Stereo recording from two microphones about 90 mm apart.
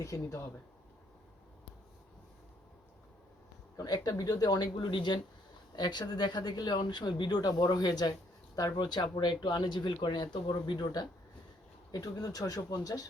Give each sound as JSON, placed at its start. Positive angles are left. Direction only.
{"t": 0.0, "sound": "speech", "side_deg": 35}
{"t": 3.8, "sound": "speech", "side_deg": 45}